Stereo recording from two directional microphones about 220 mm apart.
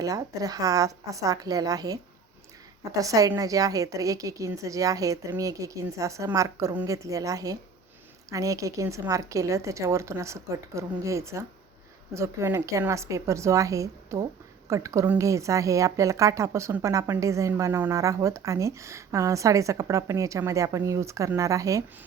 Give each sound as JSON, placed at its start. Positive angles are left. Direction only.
{"t": 0.0, "sound": "a woman's voice", "side_deg": -15}